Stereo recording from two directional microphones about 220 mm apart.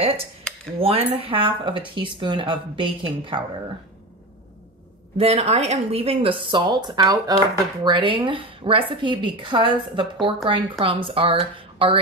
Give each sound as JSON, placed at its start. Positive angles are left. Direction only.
{"t": 0.7, "sound": "speech", "side_deg": -25}
{"t": 5.1, "sound": "speech", "side_deg": -25}